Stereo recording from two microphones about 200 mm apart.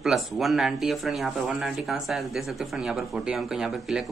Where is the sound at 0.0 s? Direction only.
Centre (ahead or behind).